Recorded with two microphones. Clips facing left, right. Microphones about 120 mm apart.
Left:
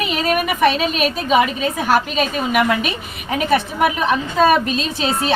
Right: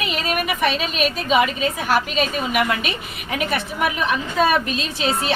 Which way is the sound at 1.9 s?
40° left (ahead or behind).